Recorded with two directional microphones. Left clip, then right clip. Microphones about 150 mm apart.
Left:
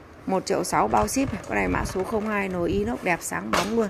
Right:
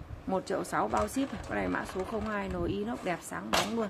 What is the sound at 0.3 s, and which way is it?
Speech, 15° left (ahead or behind).